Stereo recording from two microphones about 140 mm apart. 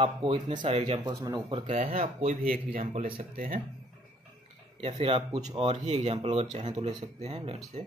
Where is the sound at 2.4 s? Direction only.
80° right.